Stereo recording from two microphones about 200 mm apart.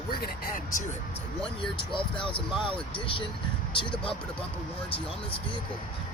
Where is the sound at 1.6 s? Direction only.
25° left (ahead or behind).